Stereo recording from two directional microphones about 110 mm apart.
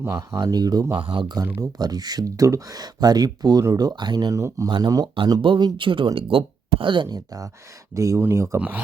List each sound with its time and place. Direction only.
0.0 s speech: 30° right (ahead or behind)
0.9 s speech: 50° right (ahead or behind)
5.1 s speech: 50° right (ahead or behind)
7.9 s speech: 30° right (ahead or behind)